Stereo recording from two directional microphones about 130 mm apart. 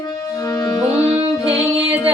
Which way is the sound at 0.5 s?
30° left (ahead or behind).